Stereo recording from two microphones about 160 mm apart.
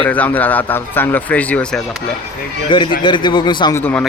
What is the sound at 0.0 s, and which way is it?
Speech, 10° left (ahead or behind).